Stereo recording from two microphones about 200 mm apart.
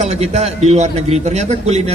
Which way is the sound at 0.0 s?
35° right (ahead or behind).